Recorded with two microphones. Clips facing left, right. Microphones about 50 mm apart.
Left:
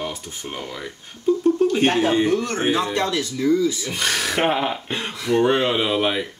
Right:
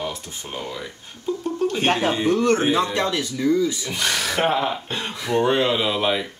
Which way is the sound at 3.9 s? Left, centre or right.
Centre.